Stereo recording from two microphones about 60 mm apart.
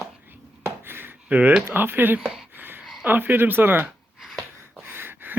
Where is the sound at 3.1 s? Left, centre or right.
Right.